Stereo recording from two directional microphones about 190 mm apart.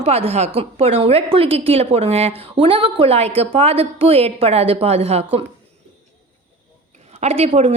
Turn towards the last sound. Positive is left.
turn(degrees=-30)  # may be behind; listen again after turning